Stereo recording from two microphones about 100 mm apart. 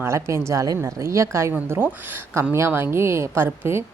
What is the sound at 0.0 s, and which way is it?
A woman's voice, 25° right (ahead or behind).